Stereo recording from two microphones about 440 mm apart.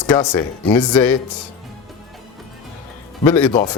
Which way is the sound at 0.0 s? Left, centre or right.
Centre.